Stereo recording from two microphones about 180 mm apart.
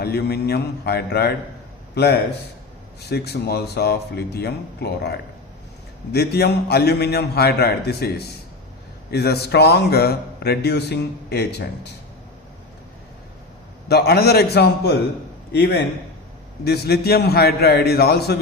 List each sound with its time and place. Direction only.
0.0 s a man's voice: 60° left (ahead or behind)
13.8 s a man's voice: 60° left (ahead or behind)